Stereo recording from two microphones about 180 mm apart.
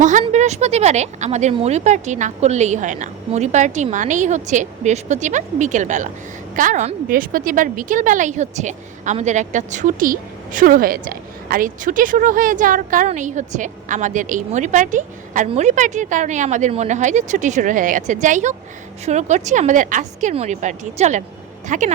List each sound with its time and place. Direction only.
0.0 s a woman's voice: 45° right (ahead or behind)